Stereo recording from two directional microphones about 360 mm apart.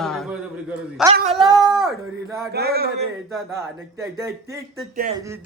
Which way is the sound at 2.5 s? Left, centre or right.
Right.